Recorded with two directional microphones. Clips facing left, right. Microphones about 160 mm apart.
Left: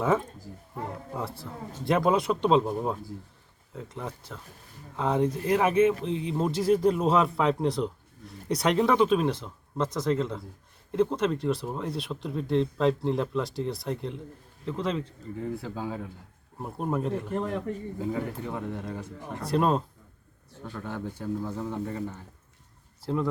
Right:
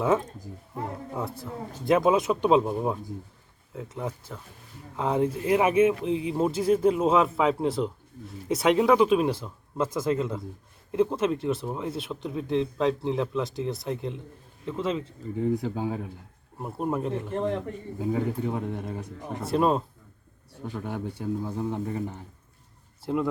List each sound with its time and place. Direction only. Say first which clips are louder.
1.2 s a man's voice: right 4 dB; centre (ahead or behind)
15.4 s speech: right 7 dB; 20° right (ahead or behind)
16.6 s speech: right 1 dB; centre (ahead or behind)
18.0 s a man's voice: right 5 dB; 15° right (ahead or behind)
19.5 s speech: right 1 dB; centre (ahead or behind)
20.5 s a man's voice: right 3 dB; 15° right (ahead or behind)